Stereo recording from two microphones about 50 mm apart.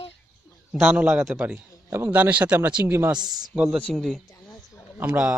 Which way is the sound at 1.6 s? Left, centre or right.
Right.